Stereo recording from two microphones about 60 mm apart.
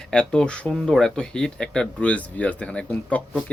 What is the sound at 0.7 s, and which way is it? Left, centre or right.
Speech, centre.